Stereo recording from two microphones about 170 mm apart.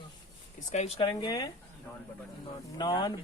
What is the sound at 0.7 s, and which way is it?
Speech, 40° left (ahead or behind).